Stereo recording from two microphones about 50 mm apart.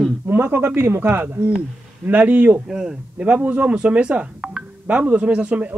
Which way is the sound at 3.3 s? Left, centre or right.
Right.